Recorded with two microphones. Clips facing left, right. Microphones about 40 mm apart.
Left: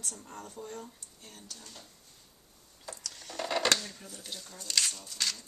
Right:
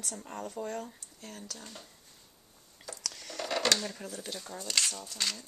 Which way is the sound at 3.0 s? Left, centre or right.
Right.